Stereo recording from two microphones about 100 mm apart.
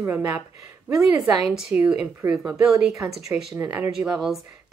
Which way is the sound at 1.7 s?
15° right (ahead or behind).